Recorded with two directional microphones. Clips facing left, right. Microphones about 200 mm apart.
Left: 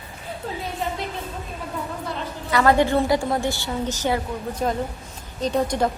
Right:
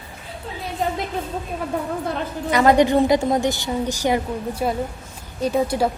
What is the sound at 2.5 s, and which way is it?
A woman's voice, 20° right (ahead or behind).